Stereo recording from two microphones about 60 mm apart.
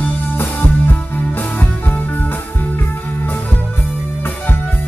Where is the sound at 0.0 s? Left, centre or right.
Left.